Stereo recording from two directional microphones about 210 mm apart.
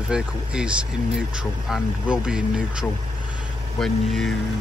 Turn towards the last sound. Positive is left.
turn(degrees=0)  # may be behind; listen again after turning